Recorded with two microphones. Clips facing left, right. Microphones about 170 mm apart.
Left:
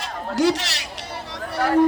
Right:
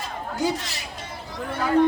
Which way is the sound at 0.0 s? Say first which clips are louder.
Left 6 dB; 80° left.